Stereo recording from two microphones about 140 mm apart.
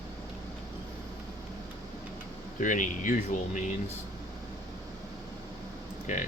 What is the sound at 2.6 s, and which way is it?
Speech, 70° left (ahead or behind).